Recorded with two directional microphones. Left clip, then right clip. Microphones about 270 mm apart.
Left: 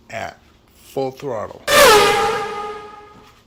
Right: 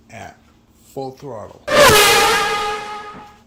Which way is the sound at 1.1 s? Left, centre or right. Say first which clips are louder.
Left 6 dB; centre.